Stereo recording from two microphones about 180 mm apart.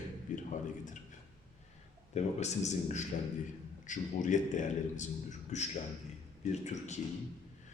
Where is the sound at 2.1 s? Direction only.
40° left (ahead or behind).